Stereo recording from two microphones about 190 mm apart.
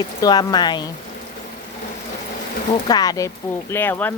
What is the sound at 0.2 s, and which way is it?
Speech, 20° left (ahead or behind).